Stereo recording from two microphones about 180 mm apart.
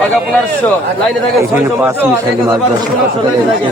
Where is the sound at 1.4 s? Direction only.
15° right (ahead or behind).